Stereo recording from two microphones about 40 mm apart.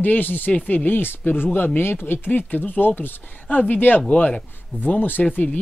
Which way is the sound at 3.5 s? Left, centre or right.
Left.